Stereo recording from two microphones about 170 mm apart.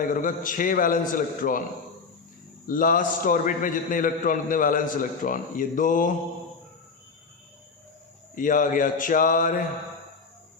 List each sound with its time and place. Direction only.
0.0 s a man's voice: 50° left (ahead or behind)
2.6 s a man's voice: 50° left (ahead or behind)
8.4 s a man's voice: 50° left (ahead or behind)